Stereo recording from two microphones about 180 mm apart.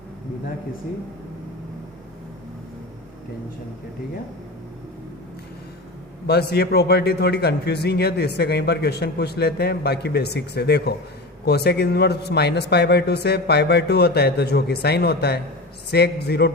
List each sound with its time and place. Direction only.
6.2 s a man's voice: 65° left (ahead or behind)